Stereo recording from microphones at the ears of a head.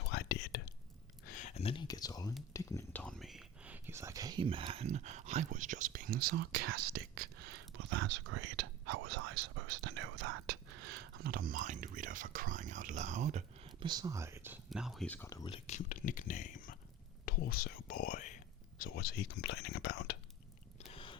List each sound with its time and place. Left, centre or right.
0.0 s whispering: left
1.2 s speech: left
3.9 s speech: right
14.8 s speech: centre
15.5 s speech: left
20.8 s a sound: left